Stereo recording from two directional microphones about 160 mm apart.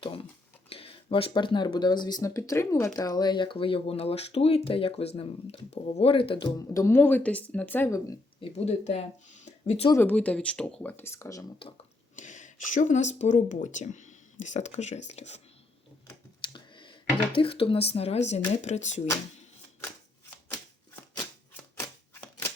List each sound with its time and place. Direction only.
0.0 s a sound: 35° left (ahead or behind)
0.7 s speech: 35° left (ahead or behind)
6.7 s speech: 15° left (ahead or behind)
8.4 s speech: 40° left (ahead or behind)
9.9 s speech: 10° left (ahead or behind)
12.1 s speech: 55° left (ahead or behind)
16.5 s a sound: 30° left (ahead or behind)
17.3 s speech: 35° left (ahead or behind)